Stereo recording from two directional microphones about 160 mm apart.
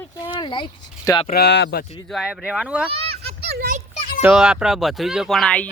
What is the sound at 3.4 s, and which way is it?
Children playing, 80° right.